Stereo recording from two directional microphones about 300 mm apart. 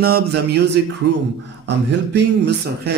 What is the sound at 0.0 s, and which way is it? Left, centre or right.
Speech, right.